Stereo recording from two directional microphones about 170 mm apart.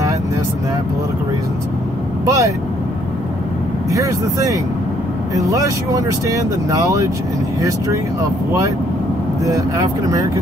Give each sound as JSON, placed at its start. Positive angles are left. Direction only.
{"t": 2.2, "sound": "speech", "side_deg": -20}
{"t": 3.9, "sound": "speech", "side_deg": -20}